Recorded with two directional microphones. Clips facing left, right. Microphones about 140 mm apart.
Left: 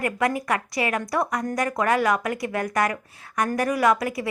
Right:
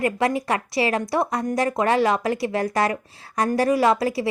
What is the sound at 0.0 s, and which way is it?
Speech, 25° right (ahead or behind).